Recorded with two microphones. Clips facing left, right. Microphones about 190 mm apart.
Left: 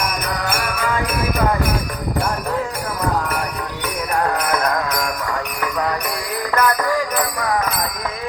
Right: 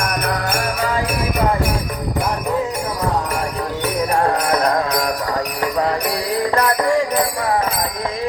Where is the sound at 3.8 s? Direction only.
30° right (ahead or behind).